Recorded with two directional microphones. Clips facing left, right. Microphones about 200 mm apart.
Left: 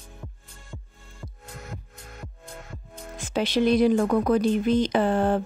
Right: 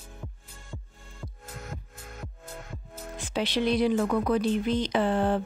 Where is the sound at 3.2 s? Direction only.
45° left (ahead or behind).